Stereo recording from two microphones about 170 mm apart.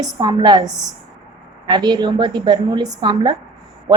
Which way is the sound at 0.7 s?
Centre (ahead or behind).